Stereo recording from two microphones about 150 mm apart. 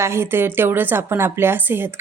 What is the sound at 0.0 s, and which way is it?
A woman's voice, 15° right (ahead or behind).